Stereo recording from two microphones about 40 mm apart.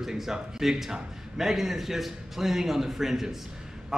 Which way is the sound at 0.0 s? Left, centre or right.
Centre.